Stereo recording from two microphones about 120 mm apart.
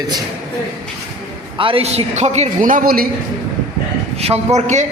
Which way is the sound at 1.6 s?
50° right (ahead or behind).